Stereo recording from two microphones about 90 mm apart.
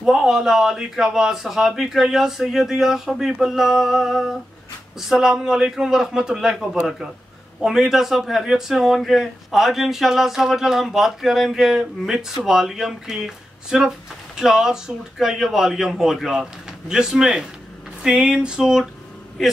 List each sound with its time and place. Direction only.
0.0 s speech: 5° right (ahead or behind)
16.9 s a sound: 5° right (ahead or behind)
19.4 s speech: centre (ahead or behind)